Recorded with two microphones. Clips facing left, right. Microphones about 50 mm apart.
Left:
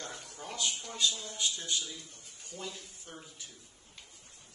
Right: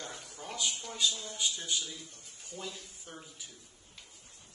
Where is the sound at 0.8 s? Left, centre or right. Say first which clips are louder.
Even; centre.